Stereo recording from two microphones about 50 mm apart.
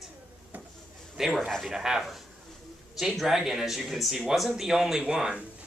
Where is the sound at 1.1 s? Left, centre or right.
Centre.